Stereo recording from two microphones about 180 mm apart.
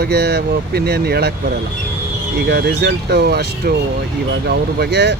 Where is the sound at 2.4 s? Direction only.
65° right (ahead or behind).